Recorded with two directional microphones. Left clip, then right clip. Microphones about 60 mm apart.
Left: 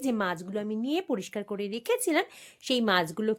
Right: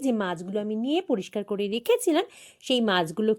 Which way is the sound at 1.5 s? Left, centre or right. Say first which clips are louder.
Right 5 dB; right.